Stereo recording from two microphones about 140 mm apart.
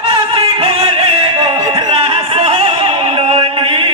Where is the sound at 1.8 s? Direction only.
45° right (ahead or behind).